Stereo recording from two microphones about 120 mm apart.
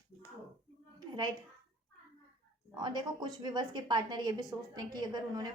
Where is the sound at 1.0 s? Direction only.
35° right (ahead or behind).